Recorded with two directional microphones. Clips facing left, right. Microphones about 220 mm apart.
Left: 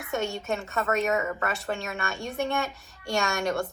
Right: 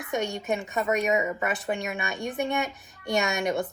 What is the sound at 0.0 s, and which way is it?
A woman's voice, 15° right (ahead or behind).